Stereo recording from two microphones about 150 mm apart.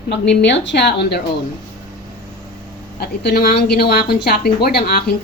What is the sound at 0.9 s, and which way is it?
Speech, 90° left.